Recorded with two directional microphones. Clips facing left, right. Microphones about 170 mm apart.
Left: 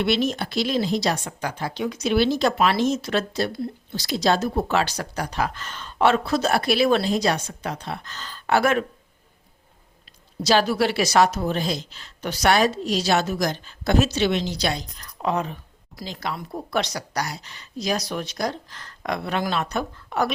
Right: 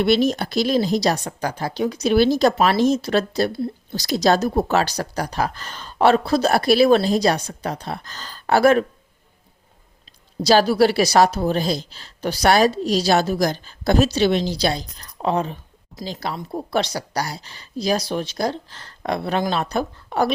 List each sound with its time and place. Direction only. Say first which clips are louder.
0.0 s speech: right 5 dB; 40° right (ahead or behind)
10.4 s speech: right 5 dB; 35° right (ahead or behind)